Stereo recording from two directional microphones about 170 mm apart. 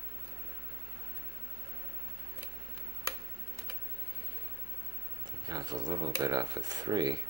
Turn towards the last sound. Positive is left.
turn(degrees=-25)  # may be behind; listen again after turning